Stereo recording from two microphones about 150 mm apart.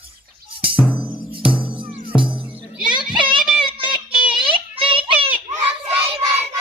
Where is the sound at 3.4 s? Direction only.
Centre (ahead or behind).